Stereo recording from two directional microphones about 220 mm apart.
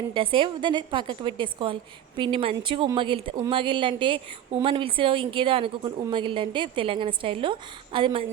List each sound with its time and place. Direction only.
0.1 s a woman's voice: 25° right (ahead or behind)